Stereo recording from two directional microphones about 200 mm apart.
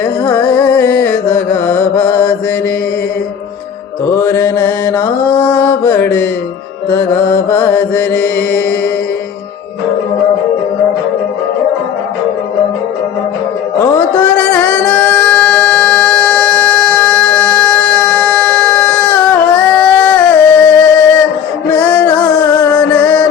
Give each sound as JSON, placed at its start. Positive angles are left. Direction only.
{"t": 0.3, "sound": "music", "side_deg": 10}
{"t": 4.1, "sound": "mantra", "side_deg": 10}
{"t": 7.5, "sound": "mantra", "side_deg": 10}
{"t": 13.7, "sound": "music", "side_deg": 10}